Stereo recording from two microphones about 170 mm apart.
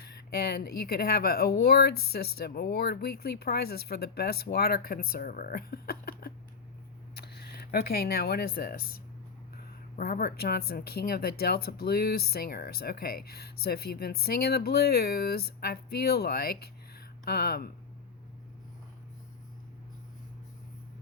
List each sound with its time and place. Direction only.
0.0 s speech: 65° left (ahead or behind)
10.0 s speech: 60° left (ahead or behind)